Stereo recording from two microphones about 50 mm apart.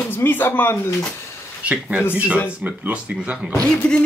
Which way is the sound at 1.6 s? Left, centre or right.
Right.